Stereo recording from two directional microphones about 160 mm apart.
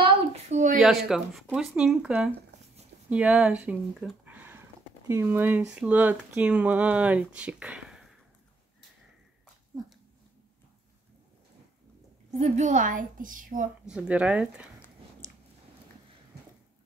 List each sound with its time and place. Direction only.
0.5 s a sound: 50° right (ahead or behind)
0.7 s speech: centre (ahead or behind)
12.3 s a woman's voice: 45° right (ahead or behind)
13.8 s speech: 5° right (ahead or behind)